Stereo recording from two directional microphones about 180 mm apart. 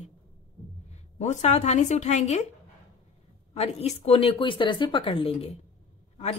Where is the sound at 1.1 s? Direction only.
40° left (ahead or behind).